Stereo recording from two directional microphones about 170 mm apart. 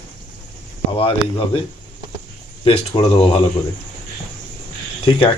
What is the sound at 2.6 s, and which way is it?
Speech, 35° left (ahead or behind).